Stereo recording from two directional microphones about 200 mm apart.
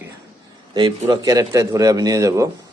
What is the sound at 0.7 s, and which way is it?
A man's voice, 20° right (ahead or behind).